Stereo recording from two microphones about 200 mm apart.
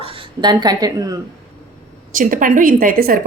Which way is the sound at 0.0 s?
20° right (ahead or behind).